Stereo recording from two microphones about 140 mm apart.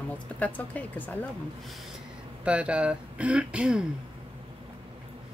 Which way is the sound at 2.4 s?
10° right (ahead or behind).